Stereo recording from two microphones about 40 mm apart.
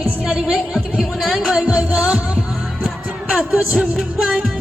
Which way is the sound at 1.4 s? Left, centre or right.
Right.